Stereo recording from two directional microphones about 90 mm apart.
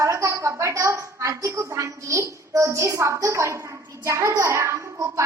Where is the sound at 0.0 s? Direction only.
35° right (ahead or behind).